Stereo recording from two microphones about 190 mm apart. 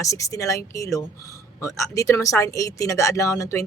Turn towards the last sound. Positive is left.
turn(degrees=15)  # may be behind; listen again after turning